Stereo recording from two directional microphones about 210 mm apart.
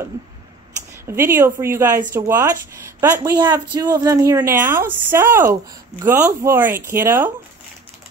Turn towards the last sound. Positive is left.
turn(degrees=-10)  # may be behind; listen again after turning